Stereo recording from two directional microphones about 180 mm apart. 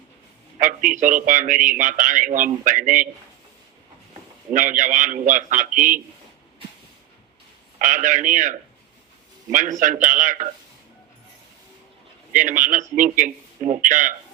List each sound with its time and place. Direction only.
0.6 s a man's voice: 45° right (ahead or behind)
4.5 s a man's voice: 45° right (ahead or behind)
7.8 s a man's voice: 45° right (ahead or behind)
12.3 s a man's voice: 45° right (ahead or behind)